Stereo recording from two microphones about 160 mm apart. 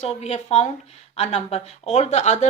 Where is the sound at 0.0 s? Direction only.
45° left (ahead or behind).